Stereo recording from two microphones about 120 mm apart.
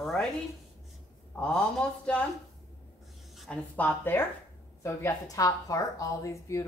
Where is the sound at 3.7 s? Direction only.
15° left (ahead or behind).